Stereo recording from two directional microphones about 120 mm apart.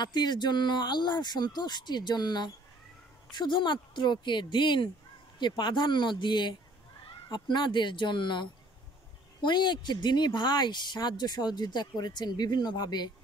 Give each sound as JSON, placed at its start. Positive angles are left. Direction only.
{"t": 0.0, "sound": "speech", "side_deg": 35}